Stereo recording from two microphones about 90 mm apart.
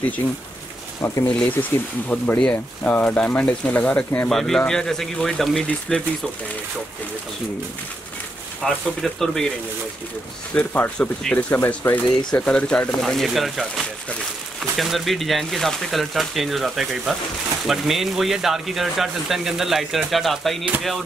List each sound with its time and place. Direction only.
1.2 s speech: 15° left (ahead or behind)
4.3 s speech: 5° left (ahead or behind)
8.6 s speech: 5° left (ahead or behind)
10.5 s speech: 15° left (ahead or behind)
11.3 s speech: 25° left (ahead or behind)
12.3 s speech: 10° left (ahead or behind)